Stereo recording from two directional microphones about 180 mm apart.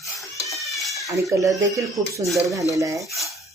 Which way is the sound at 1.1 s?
20° right (ahead or behind).